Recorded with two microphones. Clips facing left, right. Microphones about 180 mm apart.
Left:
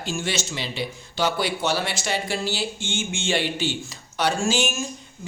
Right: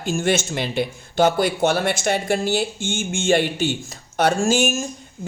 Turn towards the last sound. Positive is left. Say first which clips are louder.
# right 5 dB
turn(degrees=-50)  # may be behind; listen again after turning